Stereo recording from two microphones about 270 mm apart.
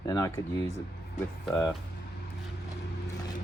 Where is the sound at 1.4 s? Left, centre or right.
Centre.